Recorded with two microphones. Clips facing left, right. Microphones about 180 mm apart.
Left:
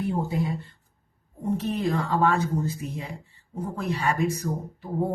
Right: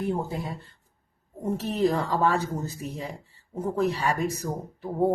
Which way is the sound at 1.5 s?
40° right (ahead or behind).